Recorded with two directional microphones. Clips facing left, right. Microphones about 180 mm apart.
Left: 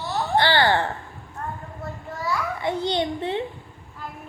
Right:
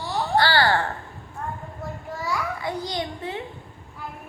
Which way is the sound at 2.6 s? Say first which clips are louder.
Left 5 dB; 25° left (ahead or behind).